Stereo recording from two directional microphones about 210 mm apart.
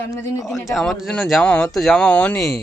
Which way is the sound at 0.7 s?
Centre (ahead or behind).